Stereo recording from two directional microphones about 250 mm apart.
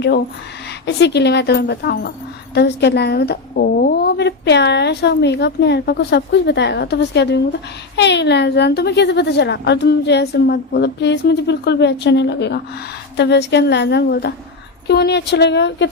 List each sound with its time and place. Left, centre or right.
0.9 s a woman's voice: left